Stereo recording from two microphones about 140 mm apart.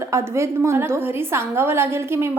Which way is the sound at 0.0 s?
20° right (ahead or behind).